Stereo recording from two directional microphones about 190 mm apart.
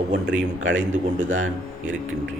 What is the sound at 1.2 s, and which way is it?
Speech, 90° right.